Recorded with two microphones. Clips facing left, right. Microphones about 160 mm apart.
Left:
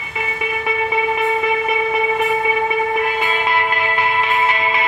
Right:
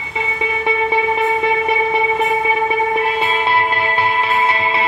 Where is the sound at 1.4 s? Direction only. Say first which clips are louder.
Right 2 dB; 30° right (ahead or behind).